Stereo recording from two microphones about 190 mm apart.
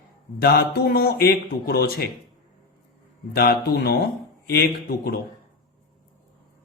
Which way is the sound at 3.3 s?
55° left (ahead or behind).